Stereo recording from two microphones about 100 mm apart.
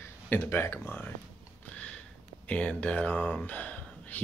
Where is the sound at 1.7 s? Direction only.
10° left (ahead or behind).